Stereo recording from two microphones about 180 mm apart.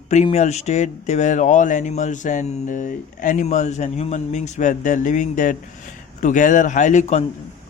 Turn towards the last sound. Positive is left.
turn(degrees=40)  # may be behind; listen again after turning